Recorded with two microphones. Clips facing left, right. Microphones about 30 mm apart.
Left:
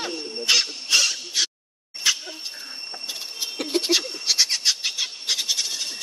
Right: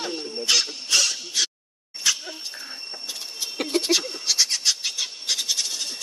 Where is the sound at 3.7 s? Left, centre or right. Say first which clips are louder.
Left 1 dB; centre.